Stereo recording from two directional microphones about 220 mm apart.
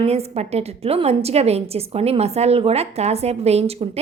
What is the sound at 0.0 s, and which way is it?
A woman's voice, 30° right (ahead or behind).